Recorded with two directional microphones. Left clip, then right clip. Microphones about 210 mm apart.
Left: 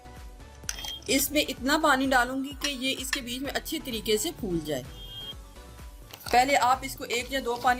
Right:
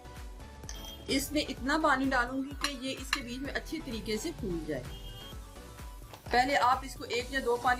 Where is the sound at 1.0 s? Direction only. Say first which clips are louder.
Left 6 dB; 45° left (ahead or behind).